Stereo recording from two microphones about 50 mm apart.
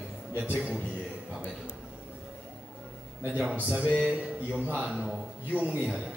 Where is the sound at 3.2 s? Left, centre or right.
Right.